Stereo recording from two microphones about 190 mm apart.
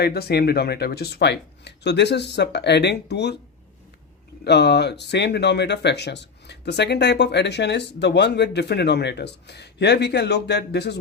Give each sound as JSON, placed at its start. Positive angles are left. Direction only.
{"t": 0.0, "sound": "speech", "side_deg": 60}
{"t": 4.4, "sound": "speech", "side_deg": 60}